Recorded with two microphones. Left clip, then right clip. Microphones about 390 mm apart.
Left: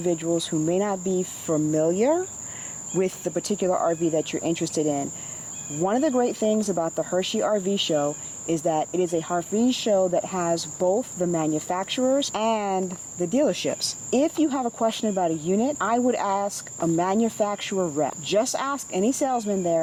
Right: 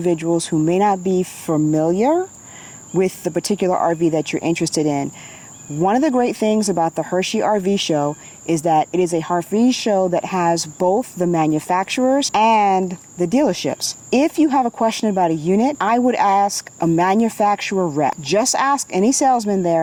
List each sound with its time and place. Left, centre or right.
0.0 s speech: right